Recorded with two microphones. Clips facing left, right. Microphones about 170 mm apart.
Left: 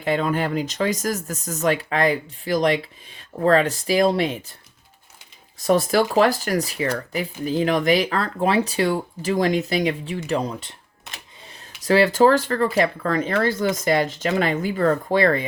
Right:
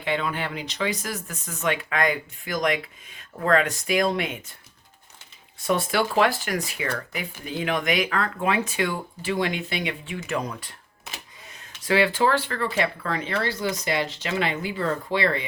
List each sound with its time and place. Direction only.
0.0 s speech: 40° left (ahead or behind)
5.5 s speech: 40° left (ahead or behind)
11.4 s speech: 35° left (ahead or behind)